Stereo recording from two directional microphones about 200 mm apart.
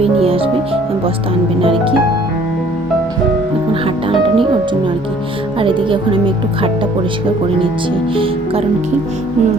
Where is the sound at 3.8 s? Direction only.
25° right (ahead or behind).